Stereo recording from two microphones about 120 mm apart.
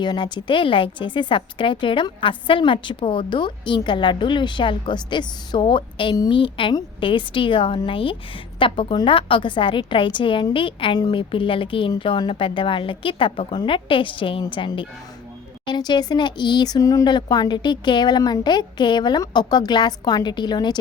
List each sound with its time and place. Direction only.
0.0 s a woman's voice: 40° left (ahead or behind)